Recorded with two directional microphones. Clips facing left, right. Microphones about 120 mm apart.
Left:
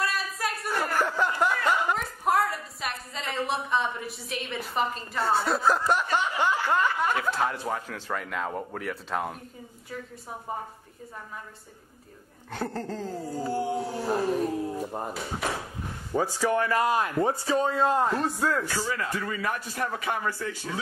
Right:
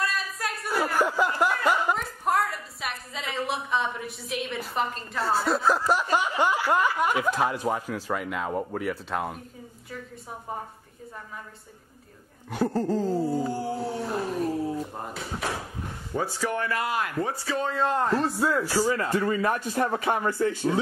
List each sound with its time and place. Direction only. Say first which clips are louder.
0.0 s a sound: even; centre (ahead or behind)
0.9 s chuckle: right 2 dB; 10° right (ahead or behind)
6.1 s speech: right 2 dB; 10° right (ahead or behind)
12.4 s speech: right 7 dB; 10° right (ahead or behind)
13.7 s speech: left 2 dB; centre (ahead or behind)
16.1 s speech: left 3 dB; 15° left (ahead or behind)
16.8 s speech: left 3 dB; 25° left (ahead or behind)
17.6 s speech: left 1 dB; 15° left (ahead or behind)
18.1 s speech: right 2 dB; centre (ahead or behind)
18.7 s speech: right 6 dB; 40° right (ahead or behind)